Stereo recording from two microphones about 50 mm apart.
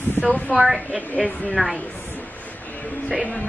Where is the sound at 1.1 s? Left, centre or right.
Left.